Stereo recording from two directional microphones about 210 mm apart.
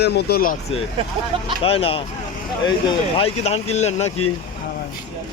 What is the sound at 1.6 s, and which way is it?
A man's voice, 25° left (ahead or behind).